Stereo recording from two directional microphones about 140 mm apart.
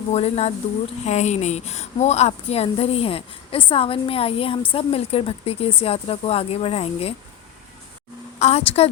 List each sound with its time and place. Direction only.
0.1 s a woman's voice: 50° left (ahead or behind)
8.4 s a woman's voice: 50° left (ahead or behind)